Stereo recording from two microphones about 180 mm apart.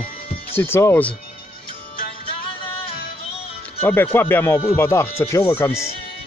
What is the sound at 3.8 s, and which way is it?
Speech, 10° left (ahead or behind).